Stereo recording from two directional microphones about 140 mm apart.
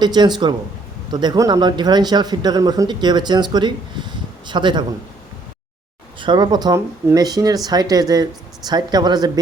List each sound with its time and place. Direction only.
0.0 s speech: 30° right (ahead or behind)
6.1 s speech: 35° right (ahead or behind)